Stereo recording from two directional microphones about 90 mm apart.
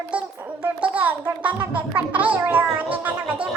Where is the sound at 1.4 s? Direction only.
15° right (ahead or behind).